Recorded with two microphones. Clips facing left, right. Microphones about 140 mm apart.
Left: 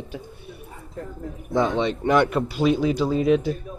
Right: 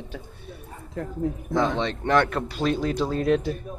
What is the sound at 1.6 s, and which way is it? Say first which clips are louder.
Speech: left 3 dB; 10° left (ahead or behind).